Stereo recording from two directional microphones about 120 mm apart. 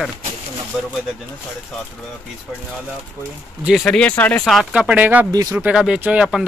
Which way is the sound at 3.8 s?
10° left (ahead or behind).